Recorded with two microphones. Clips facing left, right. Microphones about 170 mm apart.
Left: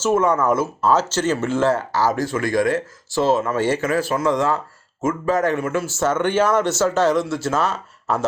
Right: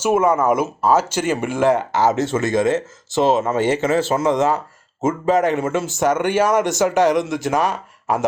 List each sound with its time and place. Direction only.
0.0 s speech: 10° right (ahead or behind)